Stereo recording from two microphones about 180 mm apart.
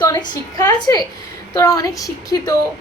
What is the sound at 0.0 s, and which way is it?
A woman's voice, 20° left (ahead or behind).